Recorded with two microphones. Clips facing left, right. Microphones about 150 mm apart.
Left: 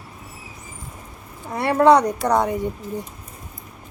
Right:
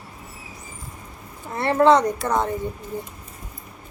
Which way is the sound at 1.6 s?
10° left (ahead or behind).